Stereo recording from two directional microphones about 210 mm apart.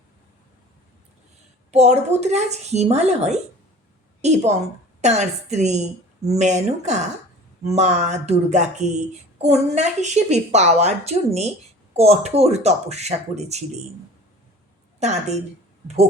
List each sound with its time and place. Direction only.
1.7 s a woman's voice: 30° right (ahead or behind)
14.9 s a woman's voice: 30° right (ahead or behind)